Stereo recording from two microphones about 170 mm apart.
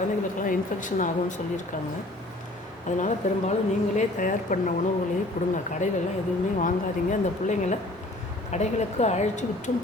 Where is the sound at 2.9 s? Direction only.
45° left (ahead or behind).